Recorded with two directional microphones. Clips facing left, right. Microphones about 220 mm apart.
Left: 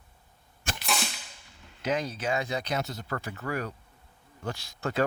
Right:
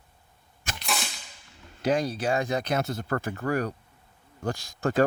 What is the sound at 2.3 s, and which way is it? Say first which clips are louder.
Speech: right 3 dB; 50° right (ahead or behind).